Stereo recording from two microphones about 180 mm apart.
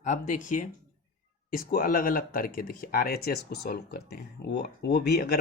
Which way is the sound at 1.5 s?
50° left (ahead or behind).